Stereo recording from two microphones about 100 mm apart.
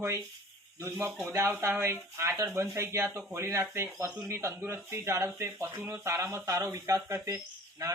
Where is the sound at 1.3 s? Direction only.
25° right (ahead or behind).